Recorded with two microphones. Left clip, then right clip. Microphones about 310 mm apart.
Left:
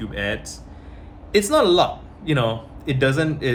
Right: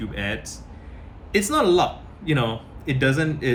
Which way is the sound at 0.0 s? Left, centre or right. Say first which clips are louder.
Left 3 dB; centre.